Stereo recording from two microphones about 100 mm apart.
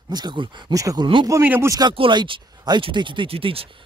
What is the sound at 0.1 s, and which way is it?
Speech, 45° right (ahead or behind).